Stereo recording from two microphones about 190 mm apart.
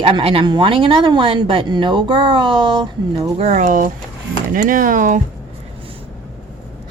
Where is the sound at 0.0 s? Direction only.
30° right (ahead or behind).